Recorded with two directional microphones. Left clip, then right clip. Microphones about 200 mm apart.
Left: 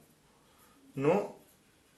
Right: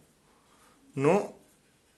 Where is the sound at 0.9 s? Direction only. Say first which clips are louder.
Right 4 dB; 55° right (ahead or behind).